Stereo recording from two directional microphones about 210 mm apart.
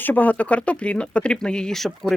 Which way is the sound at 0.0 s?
10° left (ahead or behind).